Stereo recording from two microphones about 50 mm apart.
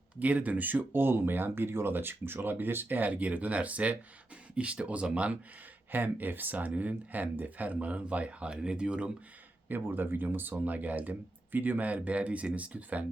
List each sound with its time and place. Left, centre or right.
0.2 s speech: right
0.9 s speech: right
5.9 s speech: right
9.6 s speech: right